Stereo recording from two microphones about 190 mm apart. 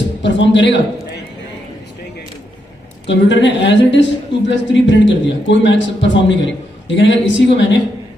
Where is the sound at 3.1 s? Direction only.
70° left (ahead or behind).